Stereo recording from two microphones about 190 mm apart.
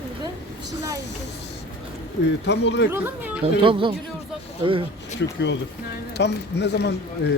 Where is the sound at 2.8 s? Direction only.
10° right (ahead or behind).